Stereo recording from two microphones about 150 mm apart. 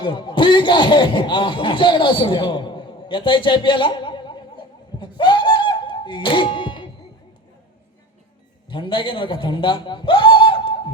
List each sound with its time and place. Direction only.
0.0 s speech: 30° left (ahead or behind)
8.7 s a man's voice: 30° left (ahead or behind)